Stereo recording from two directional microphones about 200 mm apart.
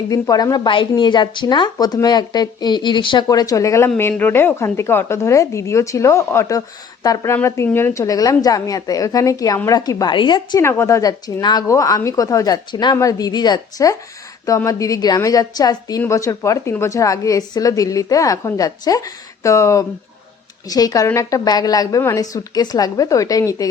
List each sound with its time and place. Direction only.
0.1 s a woman's voice: 15° left (ahead or behind)